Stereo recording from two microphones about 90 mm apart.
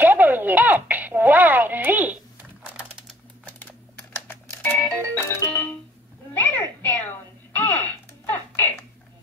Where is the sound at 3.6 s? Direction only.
20° left (ahead or behind).